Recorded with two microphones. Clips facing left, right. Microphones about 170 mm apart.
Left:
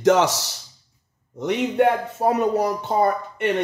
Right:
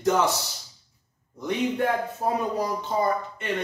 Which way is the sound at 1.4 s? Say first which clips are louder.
Left 6 dB; 75° left (ahead or behind).